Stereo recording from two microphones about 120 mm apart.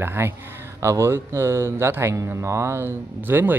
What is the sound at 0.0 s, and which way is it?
Speech, 20° right (ahead or behind).